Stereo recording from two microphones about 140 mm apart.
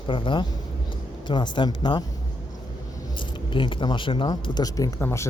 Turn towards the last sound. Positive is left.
turn(degrees=20)  # may be behind; listen again after turning